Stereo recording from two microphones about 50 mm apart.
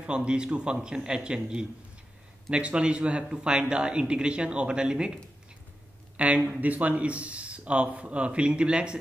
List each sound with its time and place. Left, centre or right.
0.0 s speech: centre